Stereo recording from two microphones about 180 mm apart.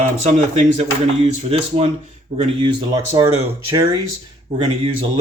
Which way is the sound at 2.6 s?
20° right (ahead or behind).